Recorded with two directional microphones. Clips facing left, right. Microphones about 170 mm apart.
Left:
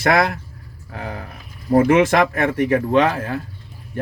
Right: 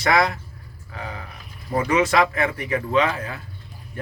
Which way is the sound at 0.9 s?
60° left (ahead or behind).